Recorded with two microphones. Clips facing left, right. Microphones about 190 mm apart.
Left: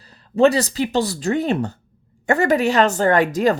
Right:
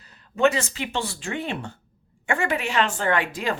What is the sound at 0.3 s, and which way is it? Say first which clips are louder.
A woman's voice: left 6 dB; 35° left (ahead or behind).